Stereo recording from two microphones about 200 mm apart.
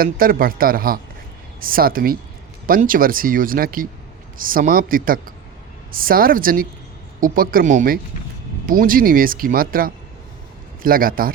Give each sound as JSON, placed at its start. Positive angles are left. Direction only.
{"t": 0.0, "sound": "speech", "side_deg": -45}